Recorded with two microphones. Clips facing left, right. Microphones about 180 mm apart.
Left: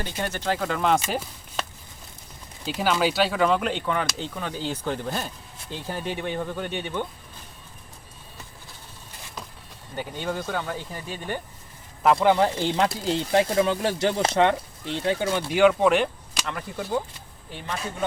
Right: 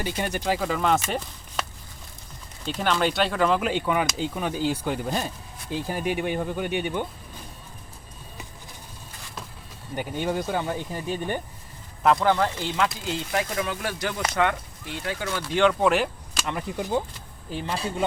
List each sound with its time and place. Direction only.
0.0 s speech: 15° right (ahead or behind)
2.6 s speech: 5° left (ahead or behind); by 7.1 s 10° right (ahead or behind)
9.9 s speech: 15° right (ahead or behind)
12.2 s speech: 15° left (ahead or behind)
12.5 s speech: 35° left (ahead or behind)
15.4 s speech: 10° left (ahead or behind)
16.5 s speech: 15° right (ahead or behind)
17.7 s speech: 30° right (ahead or behind)